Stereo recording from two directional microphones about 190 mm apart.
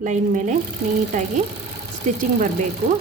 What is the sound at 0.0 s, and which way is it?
Speech, 40° right (ahead or behind).